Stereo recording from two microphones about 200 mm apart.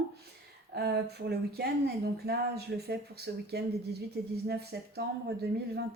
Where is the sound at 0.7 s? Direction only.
55° right (ahead or behind).